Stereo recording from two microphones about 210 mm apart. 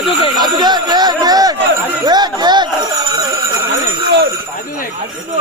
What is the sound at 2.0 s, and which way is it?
Chatter, 20° right (ahead or behind).